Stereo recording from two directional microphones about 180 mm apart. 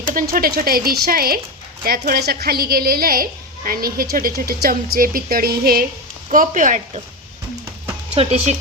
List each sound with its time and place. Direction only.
0.3 s speech: 55° right (ahead or behind)
6.3 s speech: 45° right (ahead or behind)
8.1 s speech: 35° right (ahead or behind)